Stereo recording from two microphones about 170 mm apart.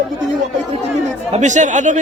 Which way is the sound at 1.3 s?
45° right (ahead or behind).